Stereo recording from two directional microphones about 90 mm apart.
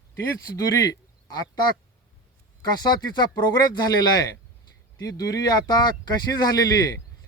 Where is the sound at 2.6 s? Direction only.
50° left (ahead or behind).